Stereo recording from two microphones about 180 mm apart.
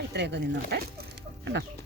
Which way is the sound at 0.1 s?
70° right (ahead or behind).